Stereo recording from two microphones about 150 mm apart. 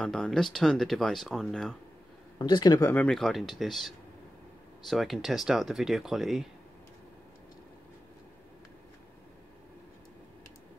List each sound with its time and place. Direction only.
0.0 s speech: 5° left (ahead or behind)
2.3 s speech: 30° left (ahead or behind)
2.9 s speech: 5° left (ahead or behind)